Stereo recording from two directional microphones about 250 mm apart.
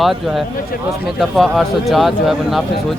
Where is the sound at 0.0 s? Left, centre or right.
Centre.